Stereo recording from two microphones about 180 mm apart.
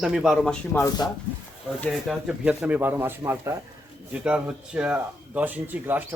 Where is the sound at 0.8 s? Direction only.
20° left (ahead or behind).